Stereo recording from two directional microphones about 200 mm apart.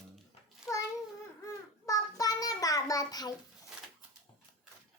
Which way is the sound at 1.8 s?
15° left (ahead or behind).